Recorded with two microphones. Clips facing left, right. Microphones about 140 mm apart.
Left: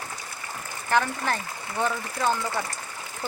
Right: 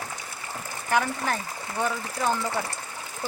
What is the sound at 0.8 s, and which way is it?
Speech, 10° right (ahead or behind).